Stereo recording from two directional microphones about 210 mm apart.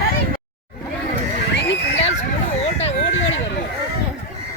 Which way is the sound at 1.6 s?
55° left (ahead or behind).